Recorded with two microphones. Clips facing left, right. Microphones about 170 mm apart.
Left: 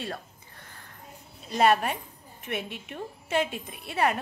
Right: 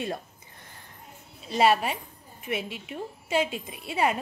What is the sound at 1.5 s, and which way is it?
A woman's voice, 5° right (ahead or behind).